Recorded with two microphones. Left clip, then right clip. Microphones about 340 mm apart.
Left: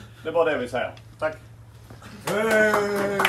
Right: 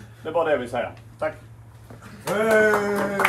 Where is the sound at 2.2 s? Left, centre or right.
Centre.